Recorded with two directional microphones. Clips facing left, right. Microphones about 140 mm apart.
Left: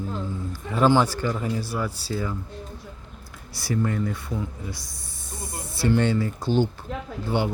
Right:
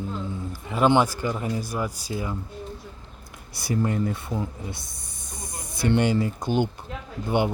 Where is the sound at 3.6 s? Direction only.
20° right (ahead or behind).